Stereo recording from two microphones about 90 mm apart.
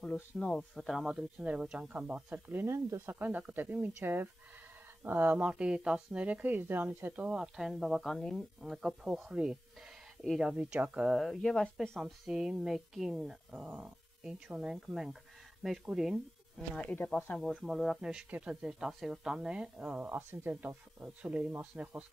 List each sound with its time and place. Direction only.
0.4 s speech: 5° left (ahead or behind)
1.4 s a woman's voice: 15° right (ahead or behind); by 3.2 s 30° right (ahead or behind)
3.2 s a woman's voice: 20° right (ahead or behind)
11.1 s speech: centre (ahead or behind)
12.0 s speech: 5° right (ahead or behind)
16.7 s speech: 10° left (ahead or behind)
17.6 s a woman's voice: 5° right (ahead or behind)